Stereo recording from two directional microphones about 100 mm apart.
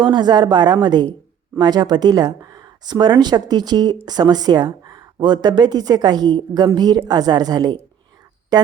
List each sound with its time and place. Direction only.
0.0 s speech: 45° right (ahead or behind)